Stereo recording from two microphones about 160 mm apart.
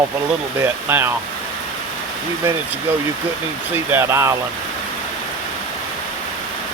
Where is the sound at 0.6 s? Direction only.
15° right (ahead or behind).